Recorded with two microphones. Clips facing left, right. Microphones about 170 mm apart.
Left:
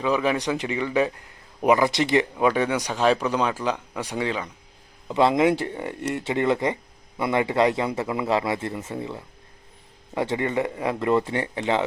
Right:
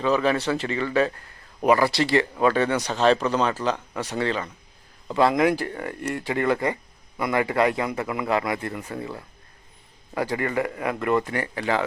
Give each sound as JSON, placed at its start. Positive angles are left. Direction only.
{"t": 0.0, "sound": "a man's voice", "side_deg": 10}